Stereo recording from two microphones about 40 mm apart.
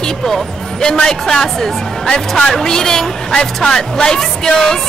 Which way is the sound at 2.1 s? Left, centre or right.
Left.